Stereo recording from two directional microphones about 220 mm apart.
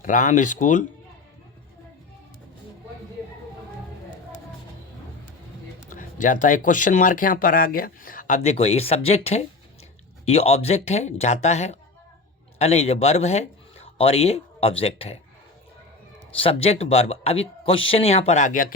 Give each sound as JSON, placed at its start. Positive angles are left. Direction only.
{"t": 0.0, "sound": "speech", "side_deg": 35}
{"t": 5.9, "sound": "speech", "side_deg": 35}
{"t": 8.4, "sound": "speech", "side_deg": 25}
{"t": 16.4, "sound": "speech", "side_deg": 25}